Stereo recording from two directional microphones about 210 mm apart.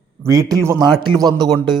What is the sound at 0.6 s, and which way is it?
Speech, 15° right (ahead or behind).